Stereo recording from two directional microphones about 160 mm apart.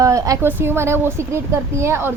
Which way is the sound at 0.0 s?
20° right (ahead or behind).